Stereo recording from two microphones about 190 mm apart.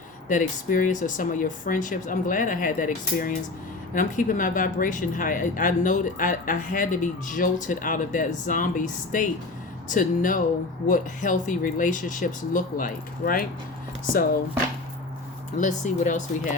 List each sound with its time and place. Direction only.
0.3 s speech: 45° left (ahead or behind)
15.5 s speech: 40° left (ahead or behind)